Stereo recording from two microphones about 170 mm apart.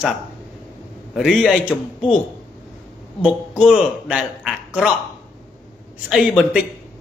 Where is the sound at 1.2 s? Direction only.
Centre (ahead or behind).